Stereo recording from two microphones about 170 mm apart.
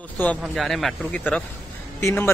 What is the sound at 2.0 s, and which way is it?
Speech, 15° left (ahead or behind).